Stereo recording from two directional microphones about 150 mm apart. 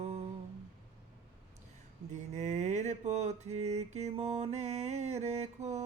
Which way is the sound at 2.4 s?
50° right (ahead or behind).